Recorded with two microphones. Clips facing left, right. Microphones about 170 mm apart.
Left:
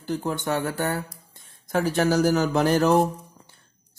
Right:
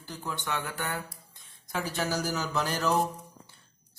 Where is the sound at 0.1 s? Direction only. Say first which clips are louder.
Left 9 dB; 50° left (ahead or behind).